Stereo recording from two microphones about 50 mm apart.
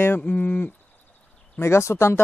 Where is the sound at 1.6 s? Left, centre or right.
Left.